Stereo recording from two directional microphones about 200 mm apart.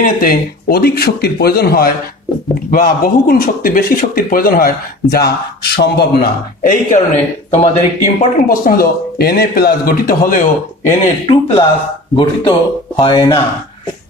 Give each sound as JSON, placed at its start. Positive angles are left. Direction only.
{"t": 0.2, "sound": "speech", "side_deg": 50}
{"t": 10.9, "sound": "speech", "side_deg": 30}